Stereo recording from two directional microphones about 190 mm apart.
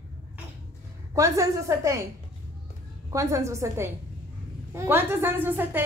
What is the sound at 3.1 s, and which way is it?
Speech, 15° right (ahead or behind).